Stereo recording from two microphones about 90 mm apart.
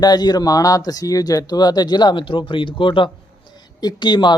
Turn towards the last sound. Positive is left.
turn(degrees=55)  # may be behind; listen again after turning